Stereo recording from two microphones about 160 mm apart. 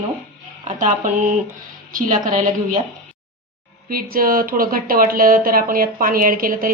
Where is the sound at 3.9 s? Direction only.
65° right (ahead or behind).